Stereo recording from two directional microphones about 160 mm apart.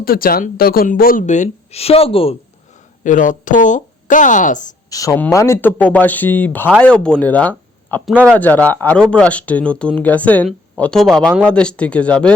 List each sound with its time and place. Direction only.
0.0 s speech: 65° left (ahead or behind); by 2.3 s 35° left (ahead or behind)
3.0 s a woman's voice: 55° left (ahead or behind)
4.9 s speech: 20° left (ahead or behind)